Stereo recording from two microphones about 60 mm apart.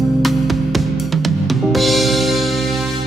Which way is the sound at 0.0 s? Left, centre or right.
Centre.